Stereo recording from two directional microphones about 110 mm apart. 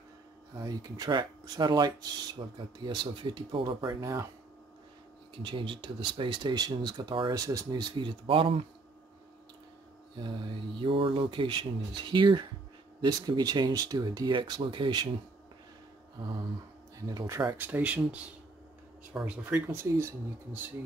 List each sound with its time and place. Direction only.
0.6 s speech: 35° right (ahead or behind)
4.0 s speech: 30° right (ahead or behind)
5.4 s speech: 45° right (ahead or behind)
7.3 s speech: 30° right (ahead or behind); by 8.6 s 55° right (ahead or behind)
10.8 s speech: 55° right (ahead or behind)
17.0 s speech: 35° right (ahead or behind)
17.6 s speech: 15° right (ahead or behind)
19.7 s speech: 25° right (ahead or behind)